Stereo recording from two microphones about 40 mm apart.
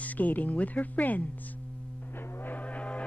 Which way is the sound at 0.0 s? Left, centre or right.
Left.